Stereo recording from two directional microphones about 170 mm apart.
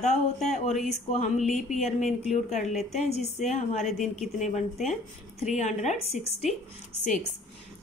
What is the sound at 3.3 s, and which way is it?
Speech, 40° left (ahead or behind).